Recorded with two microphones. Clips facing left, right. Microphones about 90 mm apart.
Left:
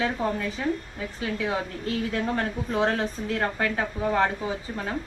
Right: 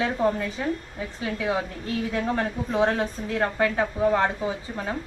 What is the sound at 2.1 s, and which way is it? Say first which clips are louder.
Speech: right 1 dB; 15° right (ahead or behind).